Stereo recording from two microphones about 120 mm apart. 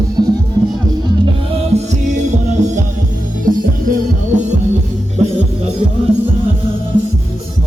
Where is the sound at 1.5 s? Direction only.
70° right (ahead or behind).